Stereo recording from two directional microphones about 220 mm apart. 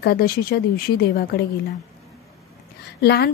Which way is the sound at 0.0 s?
45° left (ahead or behind).